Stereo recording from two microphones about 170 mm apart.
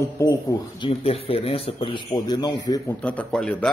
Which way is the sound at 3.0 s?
5° left (ahead or behind).